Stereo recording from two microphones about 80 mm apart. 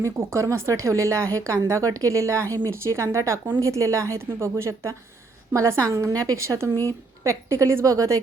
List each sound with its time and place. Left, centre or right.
0.0 s speech: right